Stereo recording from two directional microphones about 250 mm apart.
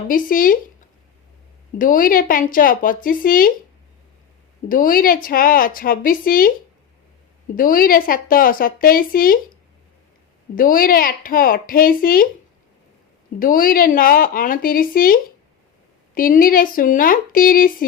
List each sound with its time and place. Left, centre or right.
0.1 s a woman's voice: left
1.8 s a woman's voice: left
4.7 s a woman's voice: left
7.5 s a woman's voice: left
10.5 s a woman's voice: left
13.4 s a woman's voice: left